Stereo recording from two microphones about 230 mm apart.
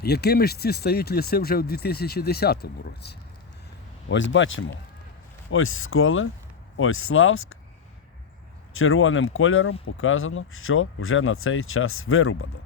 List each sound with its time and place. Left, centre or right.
0.0 s speech: left
8.7 s speech: left